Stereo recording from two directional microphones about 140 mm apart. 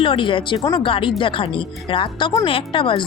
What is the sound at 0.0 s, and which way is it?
Speech, 35° left (ahead or behind).